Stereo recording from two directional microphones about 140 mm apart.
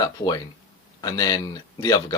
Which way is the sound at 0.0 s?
25° left (ahead or behind).